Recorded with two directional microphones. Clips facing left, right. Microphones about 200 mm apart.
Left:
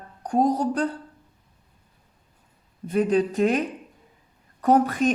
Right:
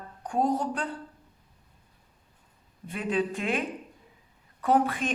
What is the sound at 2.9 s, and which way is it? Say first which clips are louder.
Speech: left 7 dB; 40° left (ahead or behind).